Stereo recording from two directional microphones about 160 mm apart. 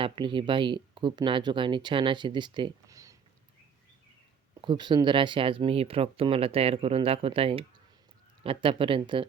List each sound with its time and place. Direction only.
0.0 s speech: 30° right (ahead or behind)
4.6 s speech: 30° right (ahead or behind)